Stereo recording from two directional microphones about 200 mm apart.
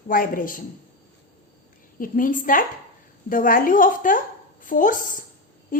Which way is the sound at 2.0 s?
45° left (ahead or behind).